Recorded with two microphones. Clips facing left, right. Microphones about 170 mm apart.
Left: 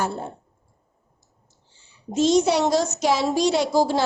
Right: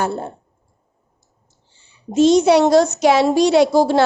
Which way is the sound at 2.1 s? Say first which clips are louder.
Right 6 dB; 65° right (ahead or behind).